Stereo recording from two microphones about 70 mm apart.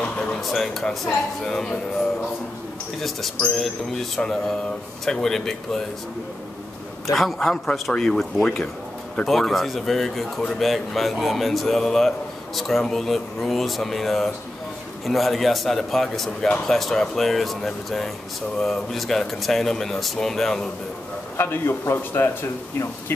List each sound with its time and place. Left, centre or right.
0.0 s a sound: centre
0.4 s speech: centre
3.0 s speech: centre
7.1 s speech: centre
7.3 s speech: centre
21.4 s a man's voice: left